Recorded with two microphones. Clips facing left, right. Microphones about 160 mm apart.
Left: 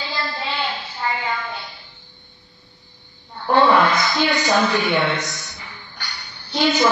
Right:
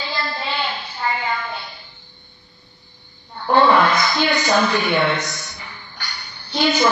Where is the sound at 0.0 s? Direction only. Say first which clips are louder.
Right 1 dB; 55° right (ahead or behind).